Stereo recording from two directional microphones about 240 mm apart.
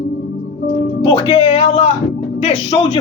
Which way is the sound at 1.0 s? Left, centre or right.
Centre.